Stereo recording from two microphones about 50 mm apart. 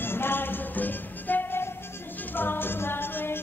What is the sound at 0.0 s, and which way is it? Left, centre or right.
Music, left.